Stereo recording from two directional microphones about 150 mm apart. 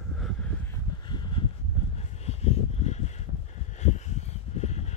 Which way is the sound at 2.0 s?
45° left (ahead or behind).